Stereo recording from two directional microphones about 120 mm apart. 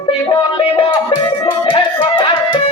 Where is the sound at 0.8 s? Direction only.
45° left (ahead or behind).